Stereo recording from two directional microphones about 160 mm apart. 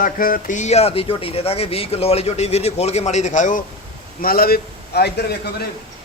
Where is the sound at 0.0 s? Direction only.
60° left (ahead or behind).